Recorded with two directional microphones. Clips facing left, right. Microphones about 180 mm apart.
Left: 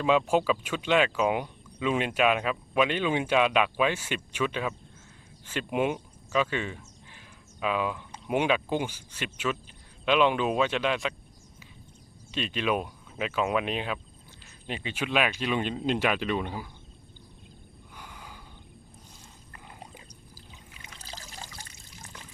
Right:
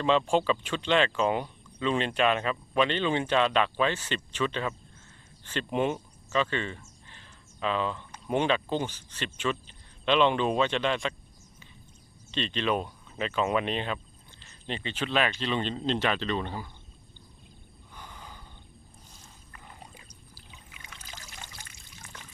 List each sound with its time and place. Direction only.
0.0 s speech: 5° left (ahead or behind)
5.5 s a sound: 10° left (ahead or behind)
8.3 s speech: 10° left (ahead or behind)
12.3 s speech: 5° left (ahead or behind)
17.9 s a sound: 10° left (ahead or behind)
20.7 s trickle: 35° left (ahead or behind)